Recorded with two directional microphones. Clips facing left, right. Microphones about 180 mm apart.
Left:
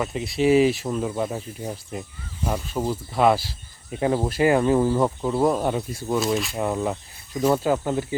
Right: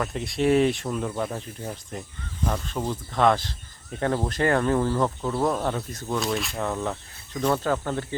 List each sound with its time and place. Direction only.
0.0 s speech: 5° left (ahead or behind)
6.6 s speech: 15° left (ahead or behind)